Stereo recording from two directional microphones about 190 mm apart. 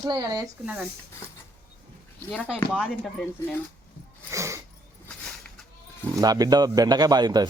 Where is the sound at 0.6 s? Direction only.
5° right (ahead or behind).